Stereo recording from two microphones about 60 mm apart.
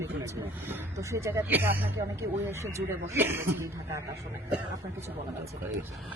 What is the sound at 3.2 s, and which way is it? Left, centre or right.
Speech, right.